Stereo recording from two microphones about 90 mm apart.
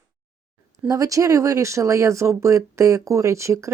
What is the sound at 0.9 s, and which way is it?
Speech, 40° right (ahead or behind).